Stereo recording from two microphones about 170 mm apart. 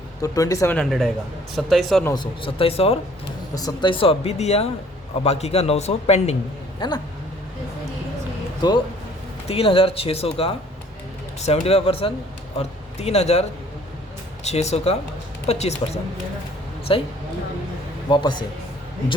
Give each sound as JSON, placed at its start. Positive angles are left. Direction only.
{"t": 0.2, "sound": "speech", "side_deg": 20}
{"t": 0.8, "sound": "a man's voice", "side_deg": 0}
{"t": 2.0, "sound": "speech", "side_deg": 25}
{"t": 3.5, "sound": "speech", "side_deg": 20}
{"t": 6.7, "sound": "speech", "side_deg": 25}
{"t": 9.5, "sound": "speech", "side_deg": 35}
{"t": 14.4, "sound": "speech", "side_deg": 40}
{"t": 16.9, "sound": "speech", "side_deg": 30}
{"t": 18.1, "sound": "speech", "side_deg": 25}